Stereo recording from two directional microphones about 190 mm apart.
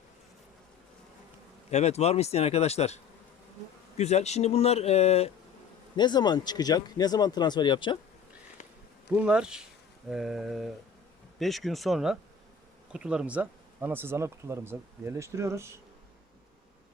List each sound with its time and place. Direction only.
1.7 s speech: 35° left (ahead or behind)
6.0 s speech: 20° left (ahead or behind)
9.1 s speech: 5° right (ahead or behind)